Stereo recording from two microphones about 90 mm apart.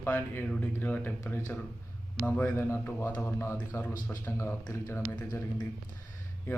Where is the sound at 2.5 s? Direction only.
30° left (ahead or behind).